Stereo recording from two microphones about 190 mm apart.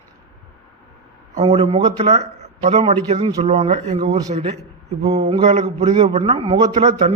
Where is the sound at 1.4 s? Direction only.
35° right (ahead or behind).